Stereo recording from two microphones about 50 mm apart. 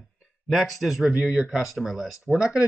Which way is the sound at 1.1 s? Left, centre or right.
Centre.